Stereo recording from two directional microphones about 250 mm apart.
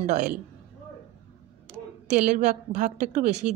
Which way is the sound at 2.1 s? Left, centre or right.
Right.